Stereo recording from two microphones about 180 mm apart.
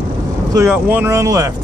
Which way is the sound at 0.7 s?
10° right (ahead or behind).